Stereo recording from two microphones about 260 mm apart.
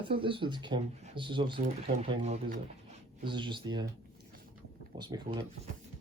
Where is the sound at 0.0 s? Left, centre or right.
Centre.